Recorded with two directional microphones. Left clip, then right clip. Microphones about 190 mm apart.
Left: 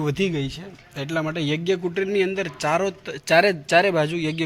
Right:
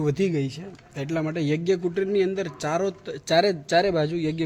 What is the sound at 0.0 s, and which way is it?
A man's voice, 10° right (ahead or behind).